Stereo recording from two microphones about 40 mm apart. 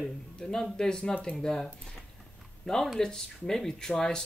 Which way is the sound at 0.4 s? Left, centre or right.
Centre.